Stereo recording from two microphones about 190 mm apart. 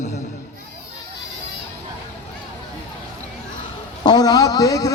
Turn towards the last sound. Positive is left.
turn(degrees=20)  # may be behind; listen again after turning